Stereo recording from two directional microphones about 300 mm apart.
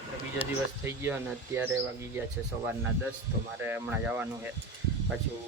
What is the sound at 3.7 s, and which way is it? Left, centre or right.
Speech, centre.